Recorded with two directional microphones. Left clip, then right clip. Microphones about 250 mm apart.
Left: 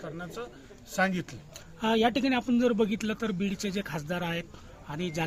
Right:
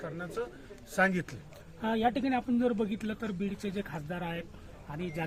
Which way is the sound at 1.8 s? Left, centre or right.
Left.